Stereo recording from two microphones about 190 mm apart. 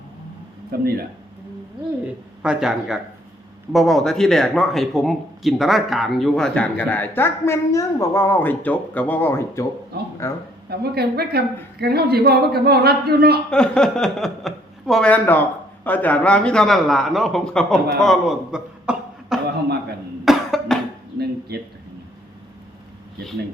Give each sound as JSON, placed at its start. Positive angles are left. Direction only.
{"t": 0.7, "sound": "a man's voice", "side_deg": -55}
{"t": 2.4, "sound": "a man's voice", "side_deg": -5}
{"t": 10.7, "sound": "a woman's voice", "side_deg": -55}
{"t": 13.5, "sound": "speech", "side_deg": 5}
{"t": 18.0, "sound": "chuckle", "side_deg": 0}
{"t": 20.2, "sound": "cough", "side_deg": 0}